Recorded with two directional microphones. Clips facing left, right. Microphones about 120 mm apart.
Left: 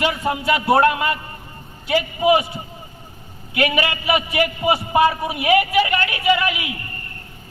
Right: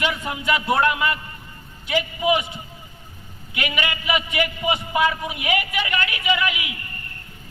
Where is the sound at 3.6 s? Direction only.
35° left (ahead or behind).